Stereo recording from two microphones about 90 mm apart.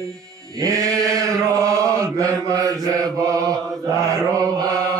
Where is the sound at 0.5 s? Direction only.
40° right (ahead or behind).